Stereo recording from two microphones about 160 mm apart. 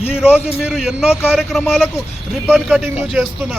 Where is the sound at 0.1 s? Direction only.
5° right (ahead or behind).